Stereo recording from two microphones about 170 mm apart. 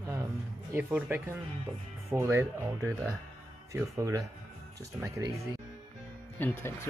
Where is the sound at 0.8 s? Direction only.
10° right (ahead or behind).